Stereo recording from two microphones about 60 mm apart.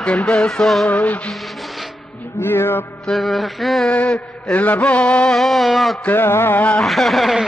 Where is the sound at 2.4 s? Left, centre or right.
Left.